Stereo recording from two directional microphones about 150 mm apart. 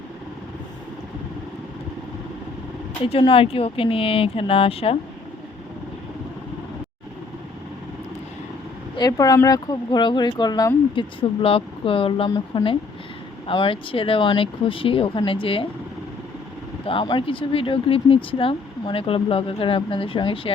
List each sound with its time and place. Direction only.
3.1 s speech: 35° left (ahead or behind)
9.0 s speech: 25° left (ahead or behind)
16.8 s speech: 35° left (ahead or behind)